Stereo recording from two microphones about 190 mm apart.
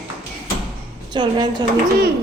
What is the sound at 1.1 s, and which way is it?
Speech, 25° right (ahead or behind).